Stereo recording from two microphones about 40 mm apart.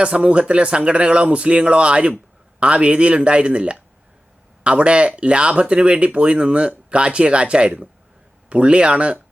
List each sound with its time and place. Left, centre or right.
0.0 s speech: right